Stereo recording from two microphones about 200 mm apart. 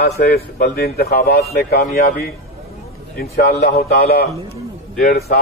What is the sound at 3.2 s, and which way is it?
A man's voice, 50° left (ahead or behind).